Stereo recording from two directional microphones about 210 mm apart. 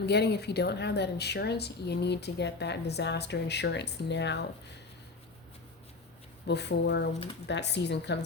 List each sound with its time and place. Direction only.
0.0 s a woman's voice: 50° left (ahead or behind)
6.5 s a woman's voice: 55° left (ahead or behind)